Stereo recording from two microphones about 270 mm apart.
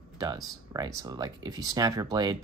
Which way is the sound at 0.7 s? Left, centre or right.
Centre.